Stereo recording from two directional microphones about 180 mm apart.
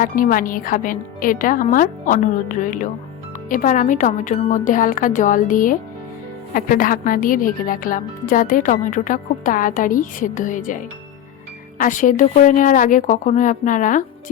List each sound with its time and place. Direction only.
0.0 s speech: 50° left (ahead or behind)